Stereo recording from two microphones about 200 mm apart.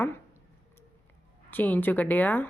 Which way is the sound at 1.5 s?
10° left (ahead or behind).